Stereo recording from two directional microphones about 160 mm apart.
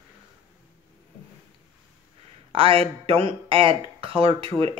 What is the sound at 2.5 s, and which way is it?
Speech, 35° right (ahead or behind).